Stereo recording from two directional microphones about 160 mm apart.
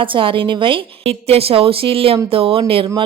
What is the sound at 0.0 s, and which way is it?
Speech, 35° right (ahead or behind).